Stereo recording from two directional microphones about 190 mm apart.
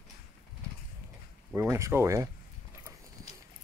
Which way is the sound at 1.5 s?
15° right (ahead or behind).